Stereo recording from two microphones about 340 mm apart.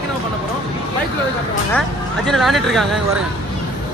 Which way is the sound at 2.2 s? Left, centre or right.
Centre.